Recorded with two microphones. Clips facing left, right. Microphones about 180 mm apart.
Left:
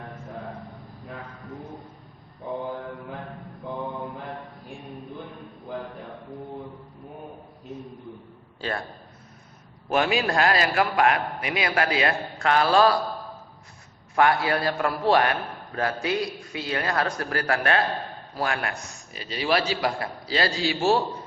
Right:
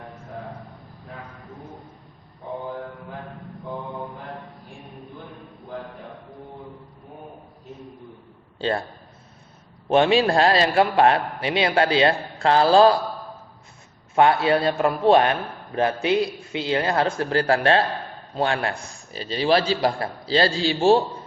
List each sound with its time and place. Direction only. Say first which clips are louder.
9.9 s a man's voice: right 6 dB; 30° right (ahead or behind)
14.2 s a man's voice: right 4 dB; 25° right (ahead or behind)